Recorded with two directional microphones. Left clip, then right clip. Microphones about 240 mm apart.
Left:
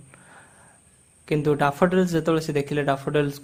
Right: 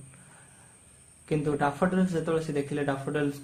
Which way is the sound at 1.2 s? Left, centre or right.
Left.